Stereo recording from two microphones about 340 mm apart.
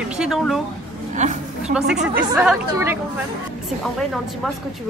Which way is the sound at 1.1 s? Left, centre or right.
Right.